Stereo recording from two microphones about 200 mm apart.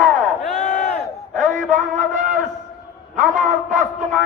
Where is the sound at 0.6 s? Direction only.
40° left (ahead or behind).